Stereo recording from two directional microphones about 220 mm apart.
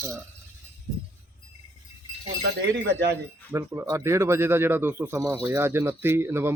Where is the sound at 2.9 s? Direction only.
50° right (ahead or behind).